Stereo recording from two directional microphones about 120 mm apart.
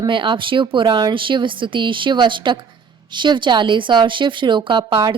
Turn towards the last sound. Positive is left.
turn(degrees=-40)  # may be behind; listen again after turning